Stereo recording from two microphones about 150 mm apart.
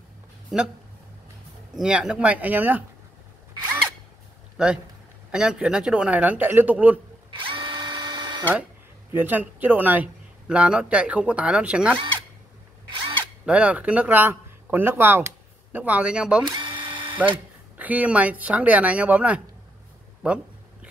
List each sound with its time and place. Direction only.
0.5 s speech: centre (ahead or behind)
1.8 s speech: 5° right (ahead or behind)
4.6 s speech: 5° right (ahead or behind)
7.2 s drill: 35° right (ahead or behind)
9.1 s speech: 10° right (ahead or behind)
13.2 s speech: 10° right (ahead or behind)
16.4 s drill: 30° right (ahead or behind)
17.7 s speech: 10° right (ahead or behind)